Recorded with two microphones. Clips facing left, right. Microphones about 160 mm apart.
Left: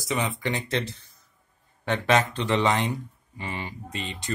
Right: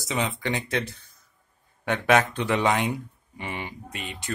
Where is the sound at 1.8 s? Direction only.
10° right (ahead or behind).